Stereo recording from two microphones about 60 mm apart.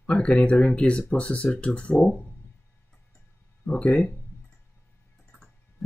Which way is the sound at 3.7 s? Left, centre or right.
Centre.